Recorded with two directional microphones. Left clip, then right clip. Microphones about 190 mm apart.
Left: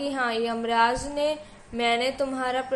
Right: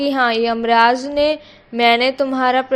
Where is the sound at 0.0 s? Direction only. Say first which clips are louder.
Right 10 dB; 45° right (ahead or behind).